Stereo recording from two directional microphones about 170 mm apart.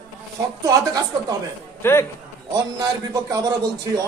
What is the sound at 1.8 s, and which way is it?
Speech, 15° left (ahead or behind).